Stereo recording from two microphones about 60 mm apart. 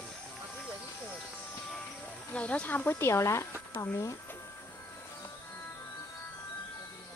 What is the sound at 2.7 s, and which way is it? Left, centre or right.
Speech, left.